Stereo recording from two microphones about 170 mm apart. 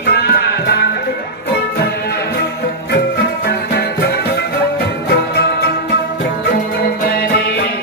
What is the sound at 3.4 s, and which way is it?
Music, 70° left (ahead or behind).